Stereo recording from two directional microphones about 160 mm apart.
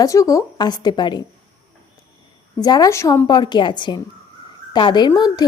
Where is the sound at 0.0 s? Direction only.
20° left (ahead or behind).